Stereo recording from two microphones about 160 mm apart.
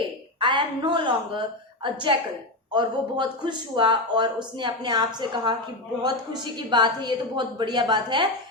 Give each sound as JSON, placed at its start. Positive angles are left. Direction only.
{"t": 0.3, "sound": "a woman's voice", "side_deg": -30}